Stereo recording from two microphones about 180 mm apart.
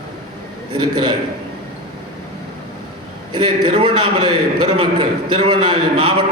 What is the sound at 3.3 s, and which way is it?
A man's voice, 25° right (ahead or behind).